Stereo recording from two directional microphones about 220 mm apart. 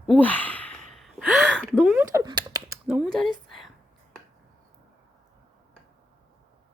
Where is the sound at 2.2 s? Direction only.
20° right (ahead or behind).